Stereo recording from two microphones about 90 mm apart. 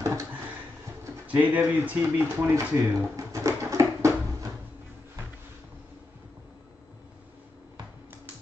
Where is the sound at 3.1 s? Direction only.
35° right (ahead or behind).